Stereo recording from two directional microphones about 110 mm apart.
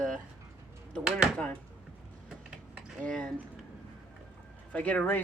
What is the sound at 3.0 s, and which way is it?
Speech, 10° left (ahead or behind).